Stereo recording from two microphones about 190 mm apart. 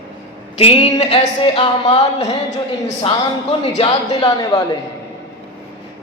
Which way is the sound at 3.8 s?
20° left (ahead or behind).